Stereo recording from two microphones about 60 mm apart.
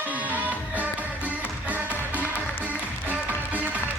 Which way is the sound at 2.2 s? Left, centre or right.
Left.